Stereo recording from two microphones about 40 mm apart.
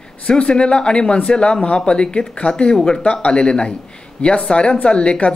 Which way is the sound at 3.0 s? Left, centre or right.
Left.